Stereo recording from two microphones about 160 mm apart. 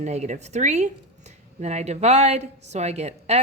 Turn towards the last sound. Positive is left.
turn(degrees=-40)  # may be behind; listen again after turning